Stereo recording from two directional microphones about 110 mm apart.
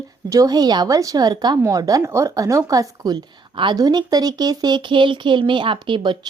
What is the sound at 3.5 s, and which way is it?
Speech, 45° right (ahead or behind).